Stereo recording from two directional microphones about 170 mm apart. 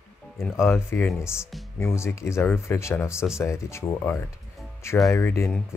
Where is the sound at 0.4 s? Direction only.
15° left (ahead or behind).